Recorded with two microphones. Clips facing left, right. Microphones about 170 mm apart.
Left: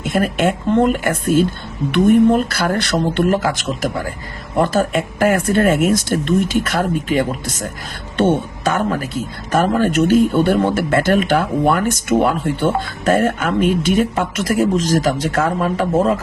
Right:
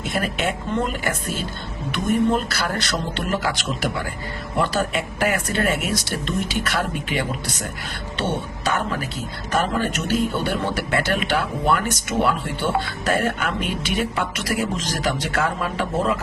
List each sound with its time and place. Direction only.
0.0 s speech: 50° left (ahead or behind)